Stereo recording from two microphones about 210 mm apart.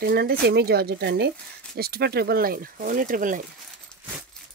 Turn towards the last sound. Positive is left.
turn(degrees=-40)  # may be behind; listen again after turning